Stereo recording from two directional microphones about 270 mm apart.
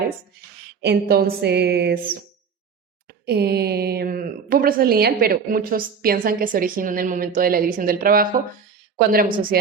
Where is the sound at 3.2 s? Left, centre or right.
Right.